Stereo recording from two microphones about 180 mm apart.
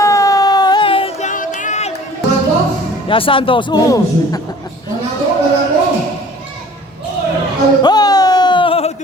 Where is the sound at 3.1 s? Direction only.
30° left (ahead or behind).